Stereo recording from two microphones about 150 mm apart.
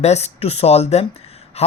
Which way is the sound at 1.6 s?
45° left (ahead or behind).